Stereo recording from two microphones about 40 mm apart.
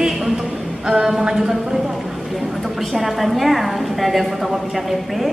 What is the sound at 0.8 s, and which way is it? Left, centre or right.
Speech, centre.